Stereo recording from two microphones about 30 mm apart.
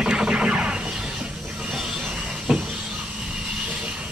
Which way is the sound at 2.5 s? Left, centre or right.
Centre.